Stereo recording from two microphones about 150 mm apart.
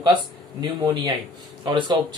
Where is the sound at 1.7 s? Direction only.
30° right (ahead or behind).